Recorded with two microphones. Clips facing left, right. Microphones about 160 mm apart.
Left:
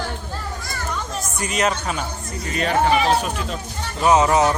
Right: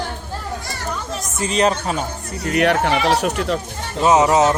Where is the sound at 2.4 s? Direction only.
70° right (ahead or behind).